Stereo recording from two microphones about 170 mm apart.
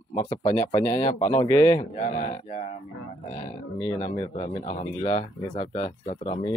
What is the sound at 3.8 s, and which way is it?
Speech, 15° left (ahead or behind).